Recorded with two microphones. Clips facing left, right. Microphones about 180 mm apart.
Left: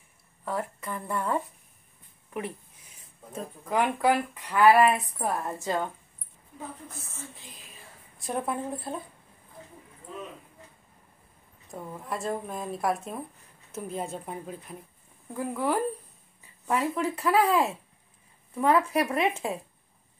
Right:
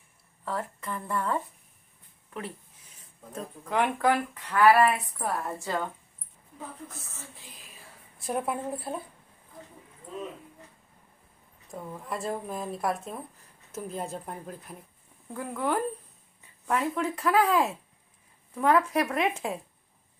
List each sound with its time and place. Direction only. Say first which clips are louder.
0.5 s speech: left 1 dB; 15° left (ahead or behind)
3.3 s speech: left 1 dB; 5° left (ahead or behind)
8.2 s speech: even; 5° right (ahead or behind)
11.7 s speech: left 1 dB; centre (ahead or behind)